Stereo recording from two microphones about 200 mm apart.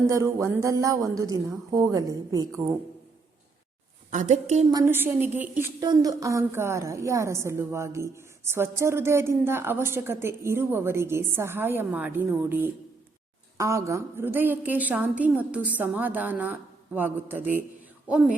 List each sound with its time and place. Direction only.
0.1 s a woman's voice: 15° right (ahead or behind)
4.1 s a woman's voice: 35° right (ahead or behind)
4.7 s a woman's voice: 15° right (ahead or behind)